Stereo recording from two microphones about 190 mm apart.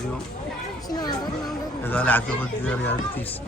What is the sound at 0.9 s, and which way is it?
Speech, 20° left (ahead or behind).